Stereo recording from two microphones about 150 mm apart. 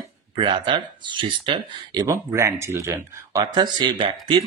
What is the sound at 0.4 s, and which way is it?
Speech, 30° right (ahead or behind).